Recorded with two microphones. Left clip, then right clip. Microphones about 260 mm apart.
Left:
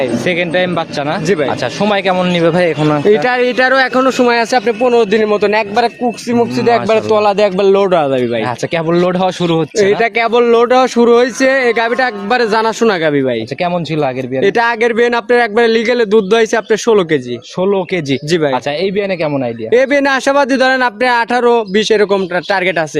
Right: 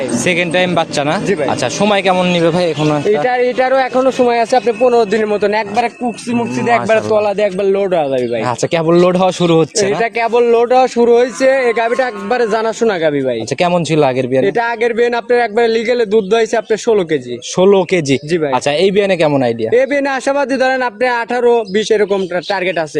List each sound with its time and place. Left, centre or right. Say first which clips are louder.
0.3 s speech: right 3 dB; centre
3.2 s a man's voice: left 1 dB; left
8.4 s speech: right 2 dB; centre
10.0 s a man's voice: left 1 dB; left
13.6 s a man's voice: right 6 dB; centre
14.4 s a man's voice: left 3 dB; left
17.6 s a man's voice: right 4 dB; centre
18.3 s a man's voice: left 2 dB; left
18.5 s a man's voice: right 3 dB; centre
19.7 s a man's voice: left 5 dB; left